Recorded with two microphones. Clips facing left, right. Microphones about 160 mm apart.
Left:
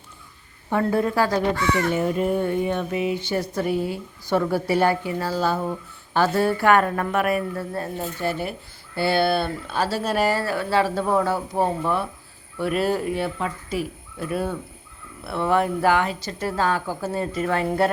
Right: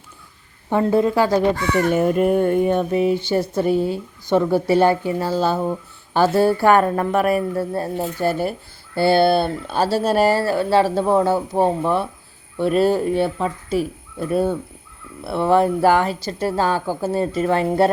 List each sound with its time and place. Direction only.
0.7 s speech: 20° right (ahead or behind)
1.7 s speech: 50° right (ahead or behind); by 17.9 s 30° right (ahead or behind)